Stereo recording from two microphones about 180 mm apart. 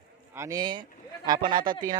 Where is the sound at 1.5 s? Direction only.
50° right (ahead or behind).